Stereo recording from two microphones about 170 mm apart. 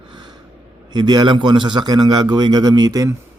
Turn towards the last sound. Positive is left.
turn(degrees=-20)  # may be behind; listen again after turning